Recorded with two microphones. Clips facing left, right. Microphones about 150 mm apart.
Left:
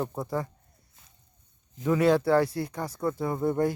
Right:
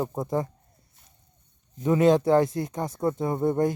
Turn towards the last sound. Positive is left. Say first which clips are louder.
# right 2 dB
turn(degrees=-20)  # may be behind; listen again after turning